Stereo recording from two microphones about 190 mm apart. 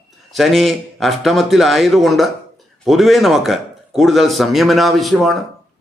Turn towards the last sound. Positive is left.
turn(degrees=0)  # may be behind; listen again after turning